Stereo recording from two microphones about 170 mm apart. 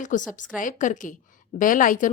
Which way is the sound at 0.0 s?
50° left (ahead or behind).